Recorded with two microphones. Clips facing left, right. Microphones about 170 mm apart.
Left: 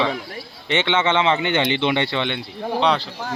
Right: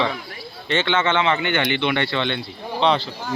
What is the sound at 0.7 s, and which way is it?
Speech, 20° left (ahead or behind).